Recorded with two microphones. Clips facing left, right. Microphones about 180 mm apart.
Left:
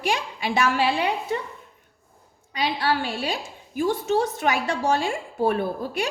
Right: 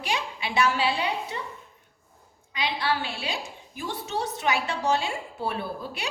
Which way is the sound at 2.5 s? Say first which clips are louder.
Left 4 dB; 40° left (ahead or behind).